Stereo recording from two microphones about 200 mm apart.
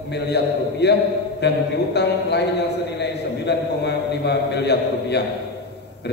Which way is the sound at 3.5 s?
55° left (ahead or behind).